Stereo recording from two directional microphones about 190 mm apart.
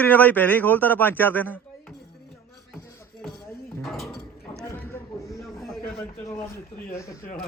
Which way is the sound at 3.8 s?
Centre (ahead or behind).